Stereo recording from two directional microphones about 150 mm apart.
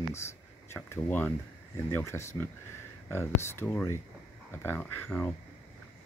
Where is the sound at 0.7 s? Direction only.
15° left (ahead or behind).